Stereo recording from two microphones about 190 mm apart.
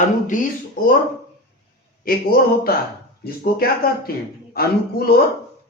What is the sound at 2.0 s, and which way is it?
A man's voice, 50° left (ahead or behind).